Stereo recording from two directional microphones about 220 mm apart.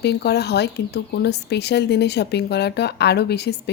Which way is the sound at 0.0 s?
50° left (ahead or behind).